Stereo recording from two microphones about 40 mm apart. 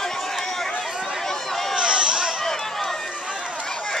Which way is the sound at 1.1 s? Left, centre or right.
Centre.